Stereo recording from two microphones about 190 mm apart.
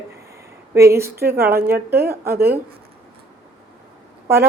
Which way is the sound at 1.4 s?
50° right (ahead or behind).